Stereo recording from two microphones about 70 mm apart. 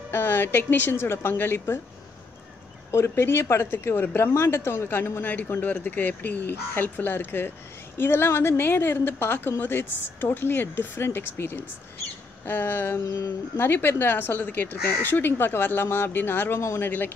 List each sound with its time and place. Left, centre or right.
0.1 s a woman's voice: left
2.9 s a woman's voice: left
5.6 s a woman's voice: left
13.0 s speech: left
13.6 s a woman's voice: left